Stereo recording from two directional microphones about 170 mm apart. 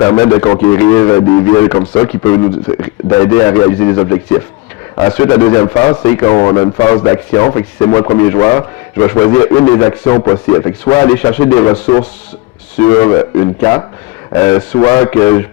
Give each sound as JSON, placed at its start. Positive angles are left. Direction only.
{"t": 0.0, "sound": "a man's voice", "side_deg": 10}